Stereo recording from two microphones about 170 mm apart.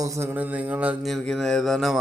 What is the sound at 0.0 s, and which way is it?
Speech, 15° right (ahead or behind).